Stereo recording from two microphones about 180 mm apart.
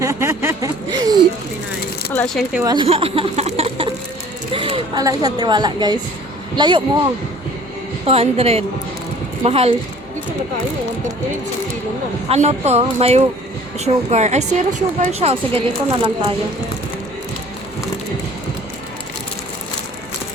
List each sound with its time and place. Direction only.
0.0 s chuckle: 15° right (ahead or behind)
2.1 s speech: centre (ahead or behind)
2.6 s a woman's voice: 20° right (ahead or behind)
2.8 s a sound: 35° right (ahead or behind)
5.0 s a woman's voice: 25° right (ahead or behind)
12.3 s speech: 35° right (ahead or behind)